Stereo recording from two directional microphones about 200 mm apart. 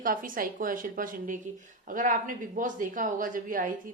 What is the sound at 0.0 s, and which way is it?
A woman's voice, 45° right (ahead or behind).